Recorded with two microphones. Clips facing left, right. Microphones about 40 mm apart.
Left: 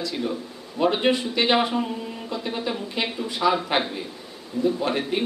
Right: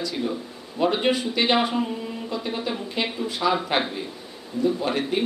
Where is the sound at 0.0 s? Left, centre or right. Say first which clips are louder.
Even; centre.